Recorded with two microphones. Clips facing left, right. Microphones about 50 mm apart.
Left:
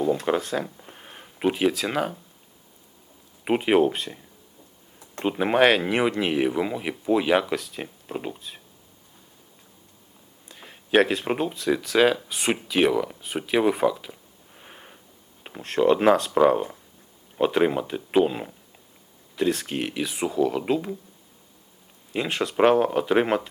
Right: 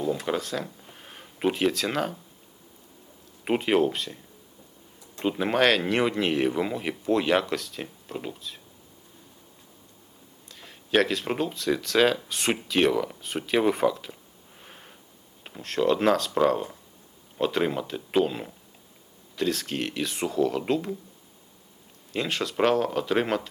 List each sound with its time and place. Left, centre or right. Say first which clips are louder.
0.3 s speech: left 4 dB; left
3.4 s speech: left 3 dB; centre
5.2 s speech: left 3 dB; centre
10.5 s speech: left 3 dB; centre
14.6 s a sound: left 2 dB; centre
15.4 s speech: left 4 dB; centre
22.1 s speech: left 3 dB; centre